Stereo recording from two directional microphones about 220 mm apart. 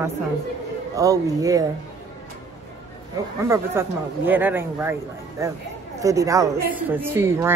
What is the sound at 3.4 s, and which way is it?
A woman's voice, 10° right (ahead or behind).